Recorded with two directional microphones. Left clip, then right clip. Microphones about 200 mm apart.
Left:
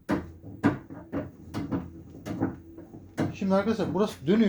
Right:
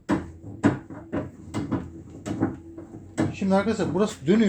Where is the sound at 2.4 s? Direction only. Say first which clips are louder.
Right 4 dB; centre (ahead or behind).